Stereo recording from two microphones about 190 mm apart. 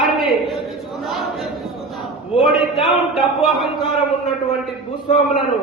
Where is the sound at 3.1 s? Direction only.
Centre (ahead or behind).